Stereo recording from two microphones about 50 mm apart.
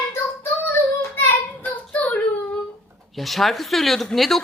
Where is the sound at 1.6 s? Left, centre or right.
Left.